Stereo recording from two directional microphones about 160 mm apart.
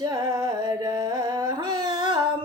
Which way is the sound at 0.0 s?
25° right (ahead or behind).